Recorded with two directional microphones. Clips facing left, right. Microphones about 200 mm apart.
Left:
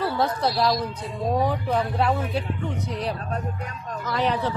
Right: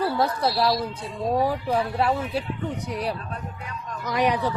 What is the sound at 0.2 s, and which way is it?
A woman's voice, 5° right (ahead or behind).